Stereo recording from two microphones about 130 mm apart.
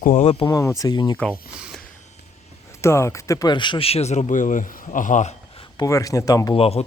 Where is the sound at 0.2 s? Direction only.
45° left (ahead or behind).